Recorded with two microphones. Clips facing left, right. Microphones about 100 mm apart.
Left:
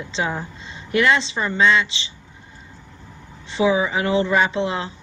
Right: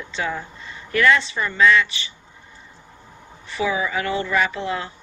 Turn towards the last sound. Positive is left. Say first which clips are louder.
# left 3 dB
turn(degrees=25)  # may be behind; listen again after turning